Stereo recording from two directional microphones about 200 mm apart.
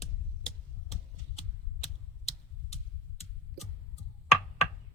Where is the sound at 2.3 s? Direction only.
30° left (ahead or behind).